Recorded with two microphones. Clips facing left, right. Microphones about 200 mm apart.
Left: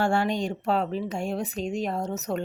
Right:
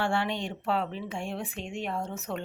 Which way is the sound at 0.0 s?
40° left (ahead or behind).